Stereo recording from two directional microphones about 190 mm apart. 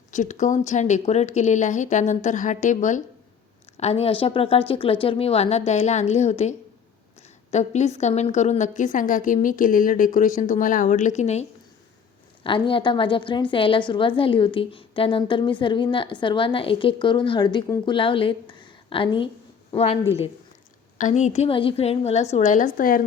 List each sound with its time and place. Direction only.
0.1 s a woman's voice: 40° left (ahead or behind)